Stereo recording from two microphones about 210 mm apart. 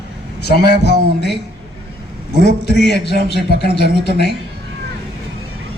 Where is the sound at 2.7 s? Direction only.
50° left (ahead or behind).